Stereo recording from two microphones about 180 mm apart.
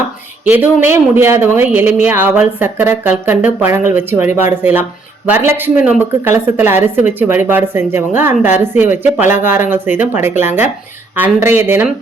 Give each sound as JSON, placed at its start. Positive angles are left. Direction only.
{"t": 0.4, "sound": "a woman's voice", "side_deg": -10}
{"t": 8.3, "sound": "a woman's voice", "side_deg": 40}
{"t": 8.7, "sound": "a woman's voice", "side_deg": -10}